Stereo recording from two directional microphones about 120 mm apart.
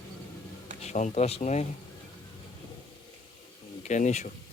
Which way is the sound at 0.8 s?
80° left.